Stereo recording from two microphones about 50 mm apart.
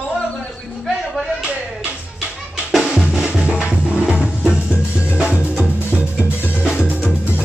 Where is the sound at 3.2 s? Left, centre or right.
Right.